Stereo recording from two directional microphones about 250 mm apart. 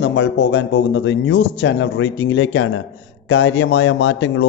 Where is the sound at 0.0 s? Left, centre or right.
Left.